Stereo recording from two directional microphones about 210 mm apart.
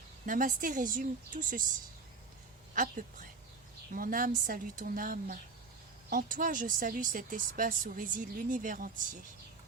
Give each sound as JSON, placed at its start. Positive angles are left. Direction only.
{"t": 0.3, "sound": "speech", "side_deg": -40}
{"t": 2.7, "sound": "speech", "side_deg": -40}